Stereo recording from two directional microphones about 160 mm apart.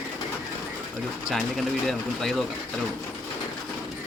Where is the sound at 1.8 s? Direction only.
Centre (ahead or behind).